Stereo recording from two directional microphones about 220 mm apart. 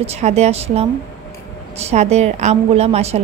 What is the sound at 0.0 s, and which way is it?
A woman's voice, 30° right (ahead or behind).